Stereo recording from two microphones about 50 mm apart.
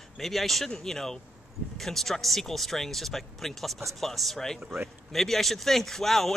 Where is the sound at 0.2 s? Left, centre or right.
Centre.